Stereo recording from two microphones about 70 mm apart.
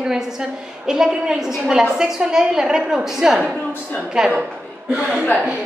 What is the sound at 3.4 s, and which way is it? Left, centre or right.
Speech, centre.